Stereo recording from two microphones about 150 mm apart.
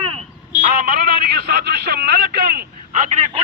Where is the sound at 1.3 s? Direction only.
90° right; by 3.2 s 55° right (ahead or behind).